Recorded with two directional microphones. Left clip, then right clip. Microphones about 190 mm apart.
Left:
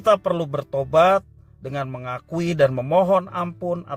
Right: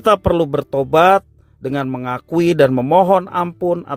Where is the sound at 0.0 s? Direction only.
40° right (ahead or behind).